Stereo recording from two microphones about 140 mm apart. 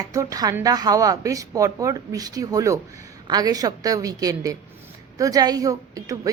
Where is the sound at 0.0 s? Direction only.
25° right (ahead or behind).